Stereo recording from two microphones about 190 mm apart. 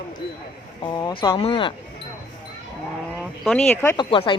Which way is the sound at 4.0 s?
25° left (ahead or behind).